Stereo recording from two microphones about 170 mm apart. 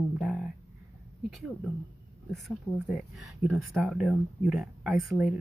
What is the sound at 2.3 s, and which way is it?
Speech, centre (ahead or behind).